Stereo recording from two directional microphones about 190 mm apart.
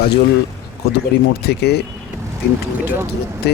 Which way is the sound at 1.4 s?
60° left (ahead or behind).